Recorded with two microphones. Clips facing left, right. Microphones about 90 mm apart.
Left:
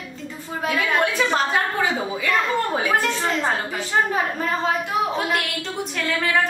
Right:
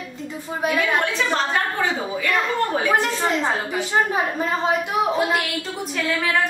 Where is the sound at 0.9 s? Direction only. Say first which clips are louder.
Left 1 dB; 5° left (ahead or behind).